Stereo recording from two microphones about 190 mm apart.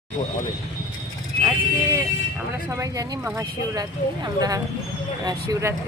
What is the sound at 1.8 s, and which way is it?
Vehicle, 15° right (ahead or behind).